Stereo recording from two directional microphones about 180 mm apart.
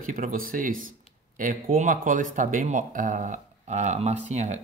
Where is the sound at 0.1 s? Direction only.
50° right (ahead or behind).